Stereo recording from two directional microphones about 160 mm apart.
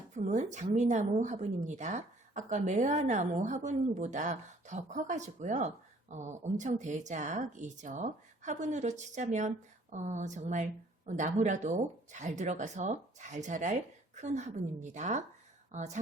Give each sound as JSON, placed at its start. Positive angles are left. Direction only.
{"t": 0.2, "sound": "a woman's voice", "side_deg": -45}